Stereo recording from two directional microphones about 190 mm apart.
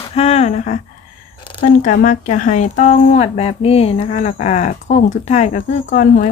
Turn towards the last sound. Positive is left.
turn(degrees=40)  # may be behind; listen again after turning